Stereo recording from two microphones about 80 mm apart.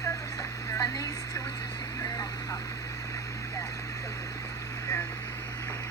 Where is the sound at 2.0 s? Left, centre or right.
Left.